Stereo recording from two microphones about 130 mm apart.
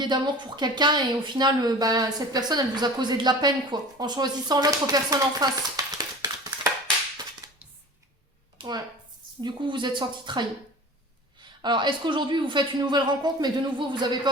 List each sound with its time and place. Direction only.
0.0 s speech: 35° right (ahead or behind)
7.4 s dishes: 25° right (ahead or behind)
8.5 s a sound: 30° right (ahead or behind)
9.4 s speech: 40° right (ahead or behind)
11.6 s speech: 35° right (ahead or behind)